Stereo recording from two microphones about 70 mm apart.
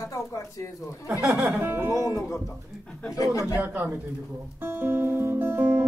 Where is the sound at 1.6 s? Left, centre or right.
Right.